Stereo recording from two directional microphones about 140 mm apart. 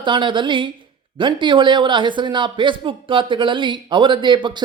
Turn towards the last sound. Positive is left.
turn(degrees=-35)  # may be behind; listen again after turning